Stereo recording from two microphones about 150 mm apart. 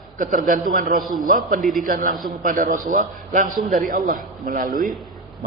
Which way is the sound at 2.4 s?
60° right (ahead or behind).